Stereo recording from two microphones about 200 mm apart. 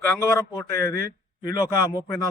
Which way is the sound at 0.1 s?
15° left (ahead or behind).